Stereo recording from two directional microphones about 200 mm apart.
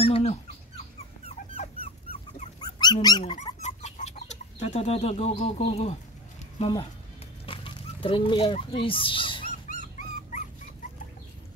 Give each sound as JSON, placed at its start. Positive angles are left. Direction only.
{"t": 0.0, "sound": "a sound", "side_deg": 30}
{"t": 2.6, "sound": "dog", "side_deg": 20}
{"t": 3.6, "sound": "chicken", "side_deg": 35}
{"t": 6.6, "sound": "speech", "side_deg": 25}
{"t": 7.4, "sound": "a sound", "side_deg": 25}
{"t": 9.7, "sound": "dog", "side_deg": 40}
{"t": 10.8, "sound": "chicken", "side_deg": 40}